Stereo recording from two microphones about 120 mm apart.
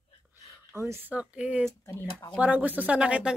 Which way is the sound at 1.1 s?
10° right (ahead or behind).